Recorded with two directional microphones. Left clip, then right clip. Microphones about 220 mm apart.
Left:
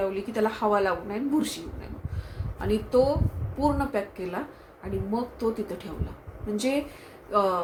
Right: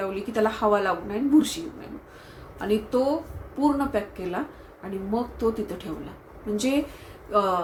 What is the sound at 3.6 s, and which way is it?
Speech, 5° left (ahead or behind).